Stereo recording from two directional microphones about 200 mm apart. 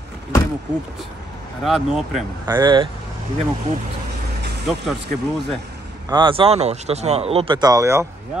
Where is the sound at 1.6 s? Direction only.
Centre (ahead or behind).